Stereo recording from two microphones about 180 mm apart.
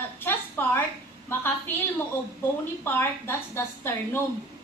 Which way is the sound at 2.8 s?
15° left (ahead or behind).